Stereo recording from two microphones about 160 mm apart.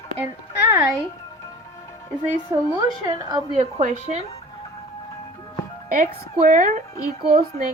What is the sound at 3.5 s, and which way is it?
Speech, 45° right (ahead or behind).